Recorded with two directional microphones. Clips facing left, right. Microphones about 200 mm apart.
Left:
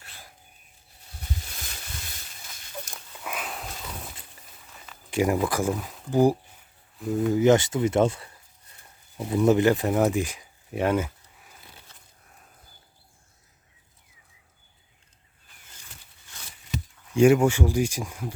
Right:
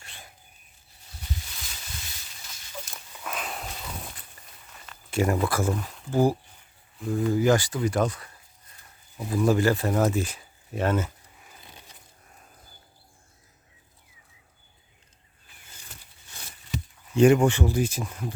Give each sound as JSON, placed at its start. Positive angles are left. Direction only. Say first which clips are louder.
{"t": 0.0, "sound": "a sound", "louder": "right 1 dB", "side_deg": 0}
{"t": 3.2, "sound": "a sound", "louder": "even", "side_deg": 5}
{"t": 5.1, "sound": "speech", "louder": "left 1 dB", "side_deg": 15}
{"t": 5.7, "sound": "speech", "louder": "even", "side_deg": 0}
{"t": 6.1, "sound": "speech", "louder": "left 2 dB", "side_deg": 15}
{"t": 7.0, "sound": "speech", "louder": "left 1 dB", "side_deg": 0}
{"t": 7.3, "sound": "speech", "louder": "left 4 dB", "side_deg": 20}
{"t": 17.2, "sound": "speech", "louder": "even", "side_deg": 10}